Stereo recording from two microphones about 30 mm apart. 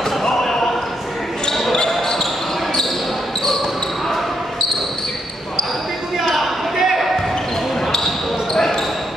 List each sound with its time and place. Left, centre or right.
0.2 s basketball bounce: centre
6.2 s basketball bounce: centre
8.5 s basketball bounce: centre